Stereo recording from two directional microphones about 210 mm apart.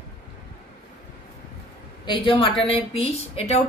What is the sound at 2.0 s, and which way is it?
Speech, 20° left (ahead or behind).